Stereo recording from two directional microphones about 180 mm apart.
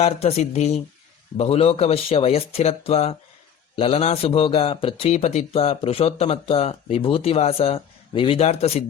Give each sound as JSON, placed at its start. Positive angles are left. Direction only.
{"t": 0.0, "sound": "a man's voice", "side_deg": 35}